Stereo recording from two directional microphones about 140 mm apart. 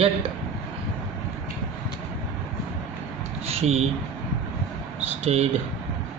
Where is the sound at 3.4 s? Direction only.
45° right (ahead or behind).